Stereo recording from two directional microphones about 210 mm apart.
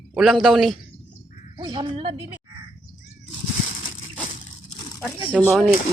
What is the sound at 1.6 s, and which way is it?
Speech, 20° right (ahead or behind).